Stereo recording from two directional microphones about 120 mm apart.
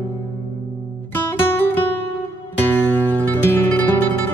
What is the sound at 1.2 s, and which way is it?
Music, 15° left (ahead or behind).